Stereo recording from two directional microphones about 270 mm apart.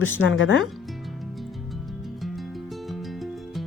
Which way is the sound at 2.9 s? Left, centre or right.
Centre.